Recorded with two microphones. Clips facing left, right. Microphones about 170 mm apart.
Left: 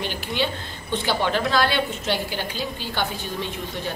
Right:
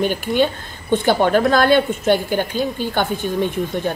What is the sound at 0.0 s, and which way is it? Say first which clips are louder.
A woman's voice: right 9 dB; 50° right (ahead or behind).